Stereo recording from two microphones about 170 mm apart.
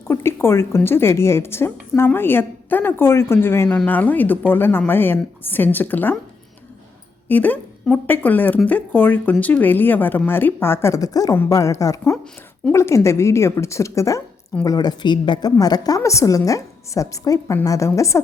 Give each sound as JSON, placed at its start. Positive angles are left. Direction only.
{"t": 0.1, "sound": "a woman's voice", "side_deg": 15}
{"t": 7.3, "sound": "a woman's voice", "side_deg": 10}